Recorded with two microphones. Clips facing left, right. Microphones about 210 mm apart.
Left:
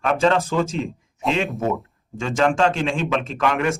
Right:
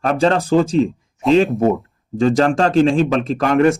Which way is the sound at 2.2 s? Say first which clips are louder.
Right 5 dB; 35° right (ahead or behind).